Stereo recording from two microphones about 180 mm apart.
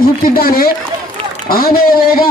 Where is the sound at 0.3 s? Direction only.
55° left (ahead or behind).